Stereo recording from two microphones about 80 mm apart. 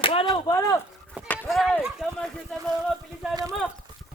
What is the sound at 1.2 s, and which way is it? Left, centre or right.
Chop, left.